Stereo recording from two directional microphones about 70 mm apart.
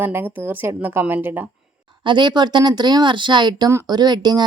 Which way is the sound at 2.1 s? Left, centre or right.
Right.